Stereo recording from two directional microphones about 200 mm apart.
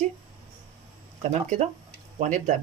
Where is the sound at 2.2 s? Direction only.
40° right (ahead or behind).